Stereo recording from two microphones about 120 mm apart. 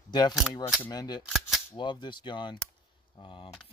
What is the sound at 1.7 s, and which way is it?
Speech, 40° left (ahead or behind).